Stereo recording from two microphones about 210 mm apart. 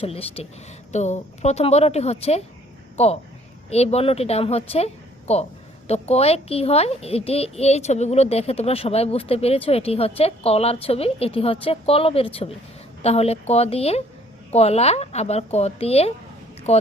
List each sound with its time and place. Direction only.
0.0 s a child's voice: 25° left (ahead or behind)